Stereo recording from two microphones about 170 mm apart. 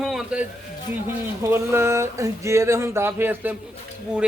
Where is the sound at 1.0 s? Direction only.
15° right (ahead or behind).